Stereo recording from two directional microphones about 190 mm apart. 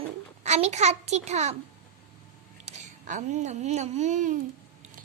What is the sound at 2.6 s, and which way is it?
A child's voice, 40° right (ahead or behind).